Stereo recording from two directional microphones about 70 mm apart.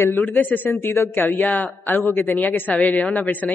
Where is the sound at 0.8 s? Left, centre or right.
Left.